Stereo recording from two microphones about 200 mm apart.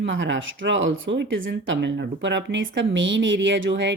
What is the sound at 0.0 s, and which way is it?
Speech, 65° right (ahead or behind).